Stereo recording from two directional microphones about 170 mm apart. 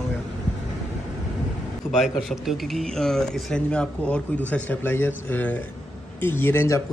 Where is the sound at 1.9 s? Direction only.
Centre (ahead or behind).